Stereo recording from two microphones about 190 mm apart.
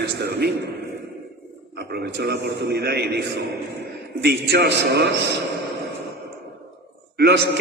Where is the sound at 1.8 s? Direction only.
60° right (ahead or behind).